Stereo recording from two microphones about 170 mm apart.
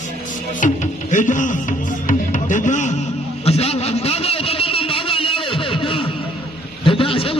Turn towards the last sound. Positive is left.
turn(degrees=30)  # may be behind; listen again after turning